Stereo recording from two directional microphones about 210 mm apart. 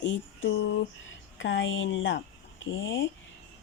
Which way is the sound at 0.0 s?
60° left (ahead or behind).